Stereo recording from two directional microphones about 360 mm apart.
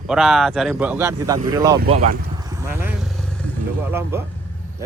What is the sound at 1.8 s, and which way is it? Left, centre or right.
Speech, right.